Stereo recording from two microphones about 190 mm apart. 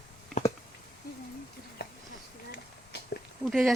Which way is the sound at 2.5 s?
60° left (ahead or behind).